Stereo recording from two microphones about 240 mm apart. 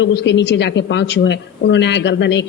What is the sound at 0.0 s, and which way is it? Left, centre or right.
A woman's voice, left.